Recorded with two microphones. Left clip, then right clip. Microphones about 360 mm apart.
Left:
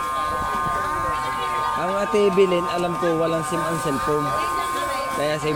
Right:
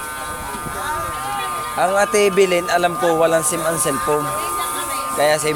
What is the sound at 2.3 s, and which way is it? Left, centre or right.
Speech, centre.